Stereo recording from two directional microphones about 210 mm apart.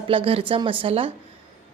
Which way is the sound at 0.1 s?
25° right (ahead or behind).